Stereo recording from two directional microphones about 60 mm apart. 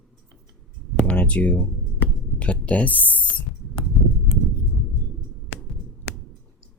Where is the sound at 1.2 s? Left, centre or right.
Left.